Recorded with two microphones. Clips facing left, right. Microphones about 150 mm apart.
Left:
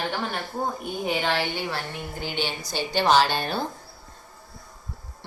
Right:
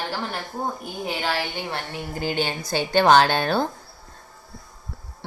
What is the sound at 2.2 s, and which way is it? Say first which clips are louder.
A woman's voice: right 5 dB; 45° right (ahead or behind).